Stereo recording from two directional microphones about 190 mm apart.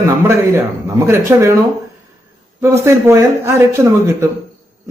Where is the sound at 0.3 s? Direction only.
15° right (ahead or behind).